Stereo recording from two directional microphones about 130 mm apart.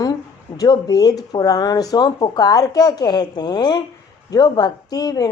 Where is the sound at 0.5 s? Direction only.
30° left (ahead or behind).